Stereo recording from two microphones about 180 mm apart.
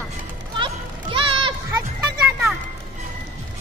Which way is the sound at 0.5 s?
30° right (ahead or behind).